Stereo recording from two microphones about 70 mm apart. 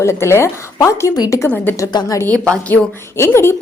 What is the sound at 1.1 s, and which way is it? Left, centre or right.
Speech, left.